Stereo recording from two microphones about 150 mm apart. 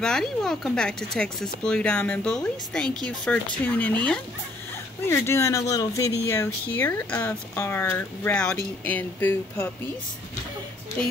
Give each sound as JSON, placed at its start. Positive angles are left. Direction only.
{"t": 0.0, "sound": "speech", "side_deg": 5}
{"t": 5.0, "sound": "speech", "side_deg": 15}